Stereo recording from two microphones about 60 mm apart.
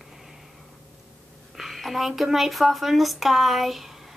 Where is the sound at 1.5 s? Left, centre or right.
Centre.